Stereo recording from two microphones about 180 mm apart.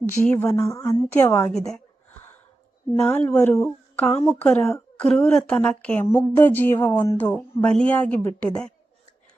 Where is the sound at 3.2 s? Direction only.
10° left (ahead or behind).